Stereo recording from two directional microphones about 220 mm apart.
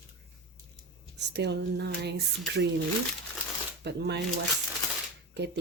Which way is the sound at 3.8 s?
50° right (ahead or behind).